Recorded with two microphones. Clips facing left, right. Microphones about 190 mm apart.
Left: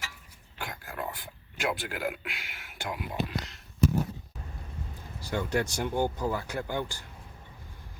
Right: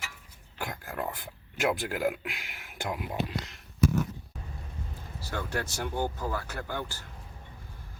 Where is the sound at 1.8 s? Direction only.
40° right (ahead or behind).